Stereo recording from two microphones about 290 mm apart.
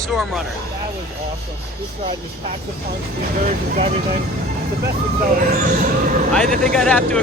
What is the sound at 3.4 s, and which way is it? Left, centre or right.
Speech, right.